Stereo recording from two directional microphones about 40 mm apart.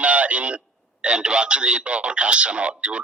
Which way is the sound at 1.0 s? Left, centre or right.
Right.